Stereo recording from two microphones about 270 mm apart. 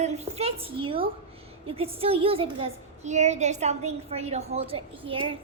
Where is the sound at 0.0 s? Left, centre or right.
Right.